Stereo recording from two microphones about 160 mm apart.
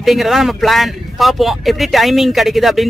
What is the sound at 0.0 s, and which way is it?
Speech, centre (ahead or behind).